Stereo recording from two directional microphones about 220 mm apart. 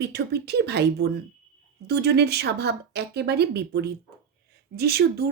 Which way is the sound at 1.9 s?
45° right (ahead or behind).